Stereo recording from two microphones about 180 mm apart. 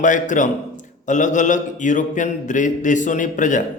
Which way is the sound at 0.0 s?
45° left (ahead or behind).